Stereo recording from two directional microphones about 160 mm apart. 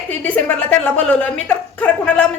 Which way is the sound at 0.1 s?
10° left (ahead or behind).